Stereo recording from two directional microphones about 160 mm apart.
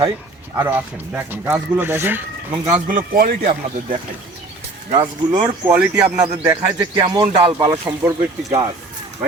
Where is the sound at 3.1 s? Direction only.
60° right (ahead or behind).